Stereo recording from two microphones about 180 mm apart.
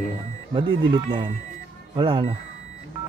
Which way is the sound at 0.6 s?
25° right (ahead or behind).